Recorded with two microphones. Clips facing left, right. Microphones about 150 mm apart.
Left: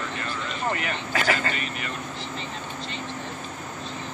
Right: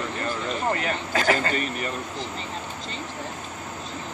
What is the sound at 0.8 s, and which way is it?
Speech, 35° right (ahead or behind).